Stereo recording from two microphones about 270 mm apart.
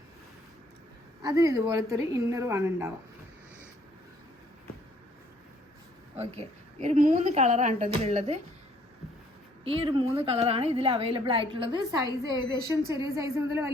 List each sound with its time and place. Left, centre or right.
1.2 s a woman's voice: centre
6.1 s a woman's voice: right
9.6 s a woman's voice: centre